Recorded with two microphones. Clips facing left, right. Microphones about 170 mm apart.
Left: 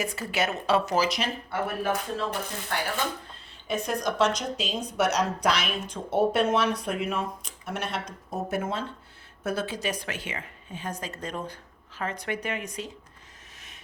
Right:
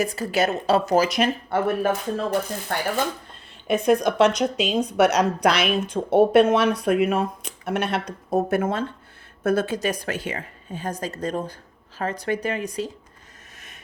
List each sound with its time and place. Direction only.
0.0 s speech: 35° right (ahead or behind)
3.7 s speech: 60° right (ahead or behind); by 12.9 s 35° right (ahead or behind)